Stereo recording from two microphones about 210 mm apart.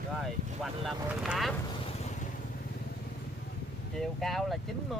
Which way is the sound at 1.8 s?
30° left (ahead or behind).